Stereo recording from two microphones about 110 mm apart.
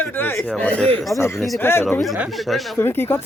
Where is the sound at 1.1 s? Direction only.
25° left (ahead or behind).